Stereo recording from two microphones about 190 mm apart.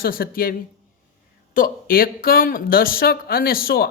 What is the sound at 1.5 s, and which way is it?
Speech, 50° left (ahead or behind).